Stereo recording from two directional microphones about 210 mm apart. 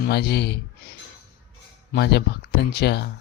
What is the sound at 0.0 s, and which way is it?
Speech, 50° left (ahead or behind).